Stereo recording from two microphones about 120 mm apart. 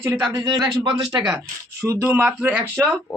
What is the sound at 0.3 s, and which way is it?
Speech, 35° right (ahead or behind).